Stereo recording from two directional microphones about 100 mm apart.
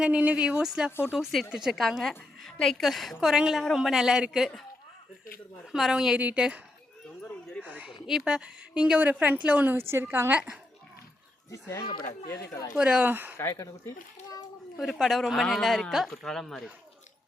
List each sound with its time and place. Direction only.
0.0 s a woman's voice: 10° right (ahead or behind)
5.7 s a woman's voice: 5° right (ahead or behind)
7.6 s a woman's voice: 15° right (ahead or behind)
12.3 s speech: 30° left (ahead or behind)
12.7 s a woman's voice: 10° right (ahead or behind)
13.3 s a child's voice: 30° left (ahead or behind)
14.8 s a woman's voice: 5° right (ahead or behind)